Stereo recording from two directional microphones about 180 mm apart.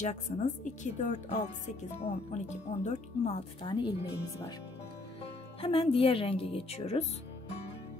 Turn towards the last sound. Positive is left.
turn(degrees=35)  # may be behind; listen again after turning